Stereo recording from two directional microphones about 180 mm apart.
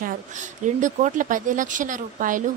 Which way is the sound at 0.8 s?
45° right (ahead or behind).